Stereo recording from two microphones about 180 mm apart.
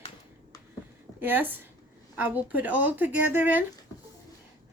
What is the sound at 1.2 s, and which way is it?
A woman's voice, 10° right (ahead or behind).